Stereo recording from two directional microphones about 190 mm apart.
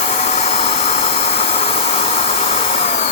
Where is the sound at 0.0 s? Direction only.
35° left (ahead or behind).